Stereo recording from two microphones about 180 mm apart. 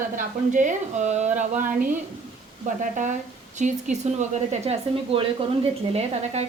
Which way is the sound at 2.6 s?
45° right (ahead or behind).